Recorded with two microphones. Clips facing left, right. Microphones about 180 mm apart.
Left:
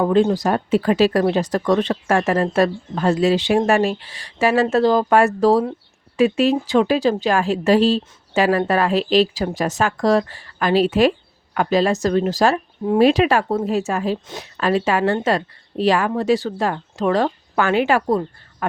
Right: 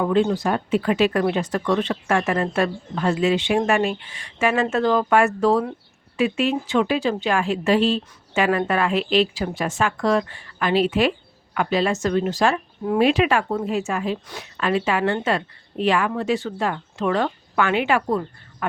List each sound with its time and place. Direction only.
0.0 s speech: 35° left (ahead or behind)